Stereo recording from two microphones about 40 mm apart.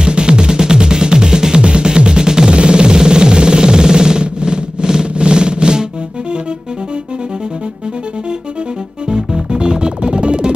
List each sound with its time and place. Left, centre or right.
0.0 s music: right
9.1 s music: right